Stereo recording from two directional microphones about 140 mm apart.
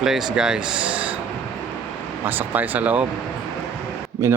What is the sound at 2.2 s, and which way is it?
Speech, 10° right (ahead or behind).